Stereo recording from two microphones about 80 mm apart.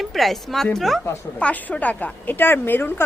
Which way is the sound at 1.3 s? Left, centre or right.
Centre.